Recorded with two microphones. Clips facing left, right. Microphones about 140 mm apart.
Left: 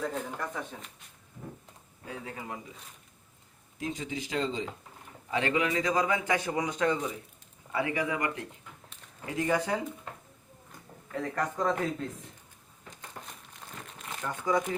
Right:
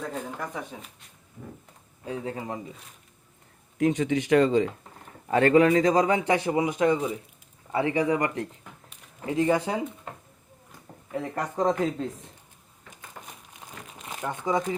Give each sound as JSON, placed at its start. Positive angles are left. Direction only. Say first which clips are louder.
{"t": 0.0, "sound": "speech", "louder": "right 1 dB", "side_deg": -5}
{"t": 2.0, "sound": "a man's voice", "louder": "right 7 dB", "side_deg": -30}
{"t": 3.8, "sound": "speech", "louder": "right 12 dB", "side_deg": -70}
{"t": 5.3, "sound": "a man's voice", "louder": "right 10 dB", "side_deg": -50}
{"t": 9.2, "sound": "speech", "louder": "right 5 dB", "side_deg": -20}
{"t": 11.1, "sound": "speech", "louder": "right 2 dB", "side_deg": -15}
{"t": 11.5, "sound": "a man's voice", "louder": "right 8 dB", "side_deg": -30}
{"t": 13.2, "sound": "crumpling", "louder": "right 2 dB", "side_deg": -10}